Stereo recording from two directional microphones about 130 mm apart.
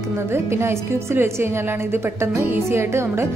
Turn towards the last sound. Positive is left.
turn(degrees=-20)  # may be behind; listen again after turning